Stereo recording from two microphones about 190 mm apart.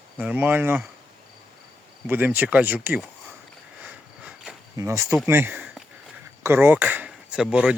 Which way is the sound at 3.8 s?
5° right (ahead or behind).